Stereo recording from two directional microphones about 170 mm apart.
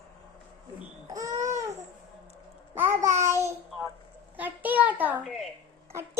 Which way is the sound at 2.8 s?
45° right (ahead or behind).